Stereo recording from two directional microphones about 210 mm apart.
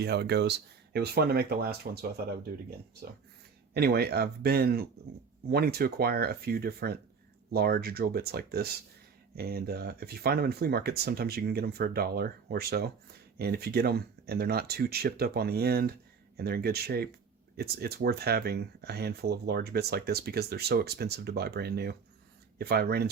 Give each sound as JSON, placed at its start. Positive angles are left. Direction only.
{"t": 0.0, "sound": "speech", "side_deg": -50}